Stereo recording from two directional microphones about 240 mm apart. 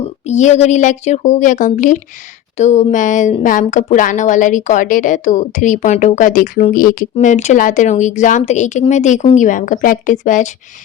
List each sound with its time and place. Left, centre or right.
0.3 s a woman's voice: left